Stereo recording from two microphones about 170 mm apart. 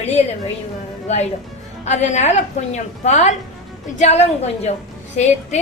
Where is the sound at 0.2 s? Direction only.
35° left (ahead or behind).